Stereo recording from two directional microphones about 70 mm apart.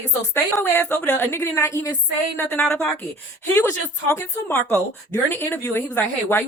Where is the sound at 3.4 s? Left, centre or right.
Left.